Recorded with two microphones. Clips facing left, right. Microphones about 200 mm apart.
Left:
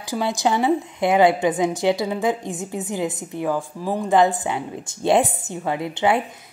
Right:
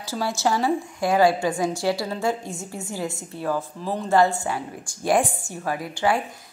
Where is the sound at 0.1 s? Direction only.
15° left (ahead or behind).